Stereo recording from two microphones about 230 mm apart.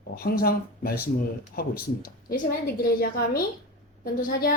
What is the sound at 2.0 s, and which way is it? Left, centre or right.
A woman's voice, left.